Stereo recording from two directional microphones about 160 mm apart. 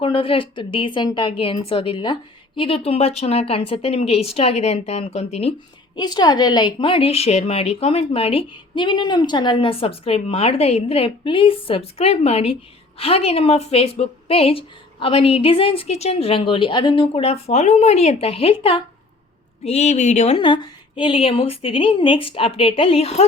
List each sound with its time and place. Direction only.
0.0 s a woman's voice: 35° left (ahead or behind)
6.0 s a woman's voice: 25° left (ahead or behind); by 20.4 s 45° left (ahead or behind)
20.4 s a woman's voice: 30° left (ahead or behind)